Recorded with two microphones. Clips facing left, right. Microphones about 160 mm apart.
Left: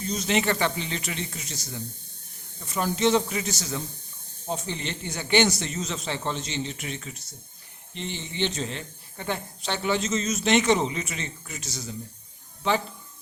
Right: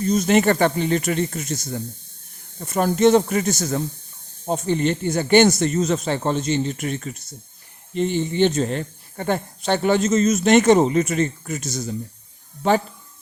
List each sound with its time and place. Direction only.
0.0 s speech: 50° right (ahead or behind)